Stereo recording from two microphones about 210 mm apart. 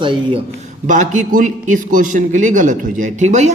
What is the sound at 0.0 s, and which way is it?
Speech, 25° right (ahead or behind).